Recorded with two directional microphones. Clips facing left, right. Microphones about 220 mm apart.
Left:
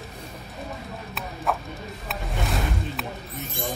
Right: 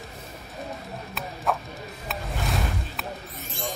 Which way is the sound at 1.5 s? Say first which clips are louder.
Even; centre (ahead or behind).